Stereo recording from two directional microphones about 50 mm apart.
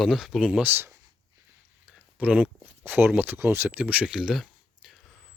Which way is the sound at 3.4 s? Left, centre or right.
Right.